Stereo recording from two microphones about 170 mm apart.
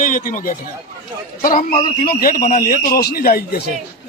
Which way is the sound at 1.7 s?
55° left (ahead or behind).